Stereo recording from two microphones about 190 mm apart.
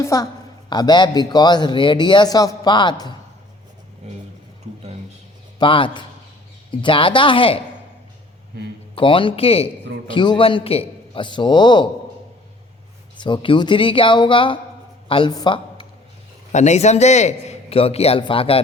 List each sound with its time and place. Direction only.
0.0 s a woman's voice: 15° left (ahead or behind)
5.5 s a man's voice: 25° left (ahead or behind)
9.0 s a man's voice: 25° left (ahead or behind)
13.1 s a man's voice: 25° left (ahead or behind)
16.5 s a man's voice: 40° left (ahead or behind)